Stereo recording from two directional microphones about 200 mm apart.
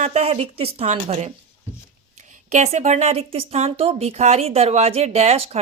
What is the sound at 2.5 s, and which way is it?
Speech, 35° right (ahead or behind).